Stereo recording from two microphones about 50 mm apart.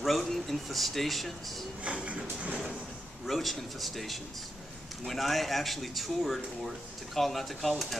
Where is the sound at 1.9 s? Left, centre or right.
Right.